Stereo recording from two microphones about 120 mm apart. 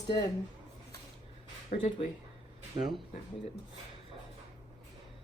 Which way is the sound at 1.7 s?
70° left (ahead or behind).